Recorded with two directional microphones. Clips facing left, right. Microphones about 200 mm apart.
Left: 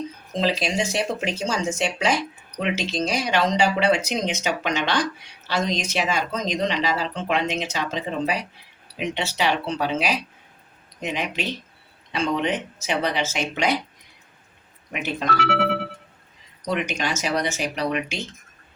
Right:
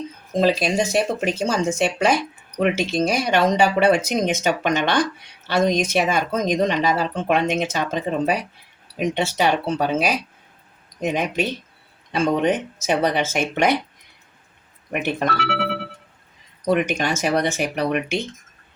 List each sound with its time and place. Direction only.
0.3 s speech: 50° right (ahead or behind)
14.9 s speech: 55° right (ahead or behind)
15.4 s music: 45° left (ahead or behind)
16.6 s speech: 55° right (ahead or behind)